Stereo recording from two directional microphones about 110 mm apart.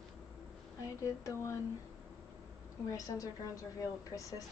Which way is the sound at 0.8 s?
30° left (ahead or behind).